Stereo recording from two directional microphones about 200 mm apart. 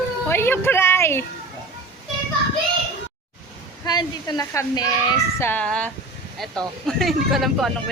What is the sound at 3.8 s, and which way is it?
A woman's voice, 20° left (ahead or behind).